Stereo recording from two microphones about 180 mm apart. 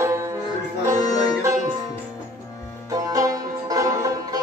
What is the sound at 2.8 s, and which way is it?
Music, 20° right (ahead or behind).